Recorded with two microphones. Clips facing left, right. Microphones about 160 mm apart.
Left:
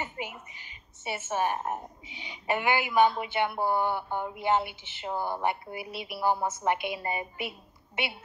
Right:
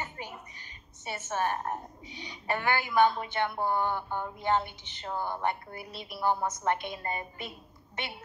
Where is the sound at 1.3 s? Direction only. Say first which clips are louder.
Left 1 dB; 15° left (ahead or behind).